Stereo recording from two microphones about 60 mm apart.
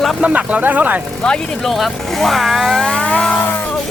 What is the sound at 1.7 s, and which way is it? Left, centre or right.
Speech, centre.